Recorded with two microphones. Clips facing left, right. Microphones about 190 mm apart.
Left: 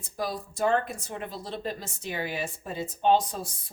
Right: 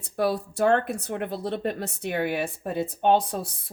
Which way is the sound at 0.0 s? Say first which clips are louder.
Right 7 dB; 65° right (ahead or behind).